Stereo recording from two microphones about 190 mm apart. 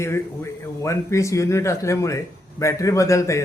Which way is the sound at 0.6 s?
15° left (ahead or behind).